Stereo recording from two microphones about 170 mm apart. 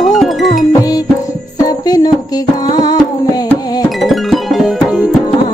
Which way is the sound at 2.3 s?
25° left (ahead or behind).